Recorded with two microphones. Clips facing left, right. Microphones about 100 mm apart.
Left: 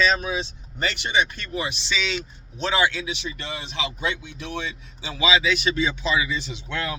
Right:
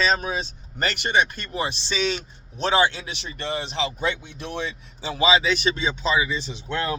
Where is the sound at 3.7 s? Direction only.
35° right (ahead or behind).